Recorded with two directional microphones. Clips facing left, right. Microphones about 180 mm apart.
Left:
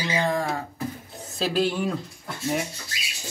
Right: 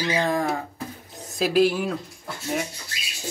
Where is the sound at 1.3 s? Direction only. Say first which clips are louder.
Right 4 dB; 10° right (ahead or behind).